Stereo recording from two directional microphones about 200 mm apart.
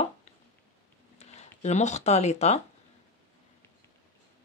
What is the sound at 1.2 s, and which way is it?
Speech, 35° left (ahead or behind).